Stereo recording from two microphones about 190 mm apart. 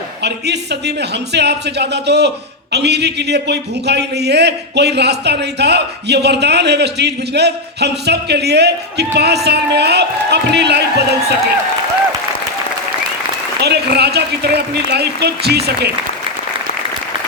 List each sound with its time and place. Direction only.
0.2 s a man's voice: 60° right (ahead or behind)
13.6 s a man's voice: 60° right (ahead or behind)